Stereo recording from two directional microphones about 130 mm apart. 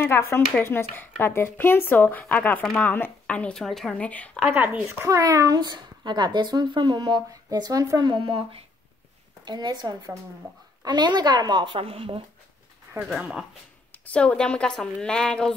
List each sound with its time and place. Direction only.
0.0 s speech: 20° left (ahead or behind)
4.6 s speech: 20° right (ahead or behind); by 12.2 s 45° right (ahead or behind)
13.2 s speech: 5° right (ahead or behind)
13.9 s speech: 10° left (ahead or behind)